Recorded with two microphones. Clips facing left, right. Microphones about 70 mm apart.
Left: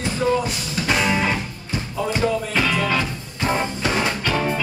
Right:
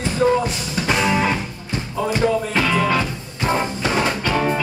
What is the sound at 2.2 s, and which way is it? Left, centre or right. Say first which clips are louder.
Music: right 3 dB; right.